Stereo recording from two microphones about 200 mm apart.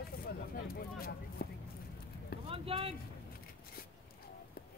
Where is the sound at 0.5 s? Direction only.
50° left (ahead or behind).